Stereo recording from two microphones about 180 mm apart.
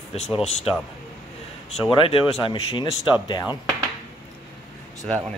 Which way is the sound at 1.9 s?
30° left (ahead or behind).